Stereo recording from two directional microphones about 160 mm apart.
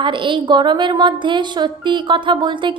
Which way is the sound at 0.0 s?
30° right (ahead or behind).